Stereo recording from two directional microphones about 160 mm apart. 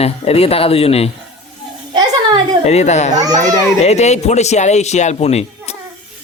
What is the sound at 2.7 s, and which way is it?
Speech, 45° left (ahead or behind).